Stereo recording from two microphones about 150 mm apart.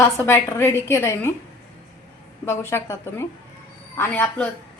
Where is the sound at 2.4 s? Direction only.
15° left (ahead or behind).